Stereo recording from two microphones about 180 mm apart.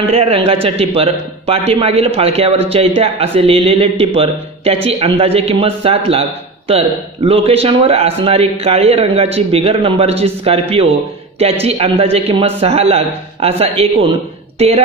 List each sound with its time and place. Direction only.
0.0 s speech: 35° right (ahead or behind)